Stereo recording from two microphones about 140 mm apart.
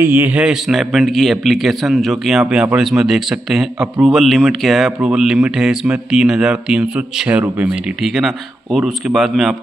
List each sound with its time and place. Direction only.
0.0 s a man's voice: 15° right (ahead or behind)